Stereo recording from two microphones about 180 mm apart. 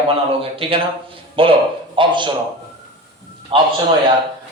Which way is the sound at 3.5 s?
30° right (ahead or behind).